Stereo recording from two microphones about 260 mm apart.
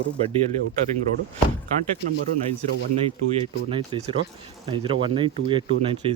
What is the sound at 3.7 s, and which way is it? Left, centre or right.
Speech, right.